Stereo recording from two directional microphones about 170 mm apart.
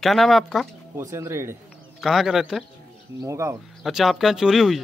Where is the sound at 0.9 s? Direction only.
15° right (ahead or behind).